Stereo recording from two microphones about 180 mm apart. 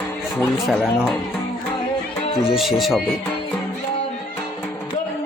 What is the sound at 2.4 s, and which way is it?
Speech, centre (ahead or behind).